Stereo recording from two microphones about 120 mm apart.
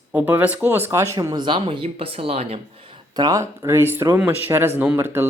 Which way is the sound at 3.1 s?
30° right (ahead or behind).